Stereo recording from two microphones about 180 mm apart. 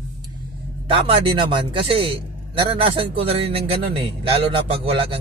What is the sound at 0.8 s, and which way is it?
A man's voice, 30° right (ahead or behind).